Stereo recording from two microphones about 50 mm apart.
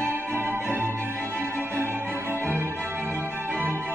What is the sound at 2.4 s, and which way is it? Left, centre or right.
Music, right.